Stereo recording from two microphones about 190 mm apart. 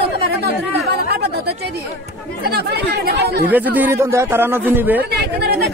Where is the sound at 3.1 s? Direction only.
60° right (ahead or behind).